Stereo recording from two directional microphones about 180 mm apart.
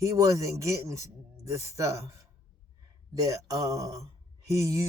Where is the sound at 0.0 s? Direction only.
15° right (ahead or behind).